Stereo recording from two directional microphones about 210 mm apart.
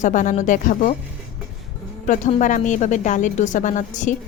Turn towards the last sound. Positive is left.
turn(degrees=35)  # may be behind; listen again after turning